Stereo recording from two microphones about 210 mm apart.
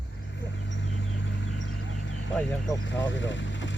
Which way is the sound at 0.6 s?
60° left (ahead or behind).